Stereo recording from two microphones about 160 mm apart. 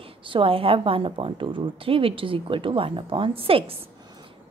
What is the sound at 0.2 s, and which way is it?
Speech, 35° right (ahead or behind).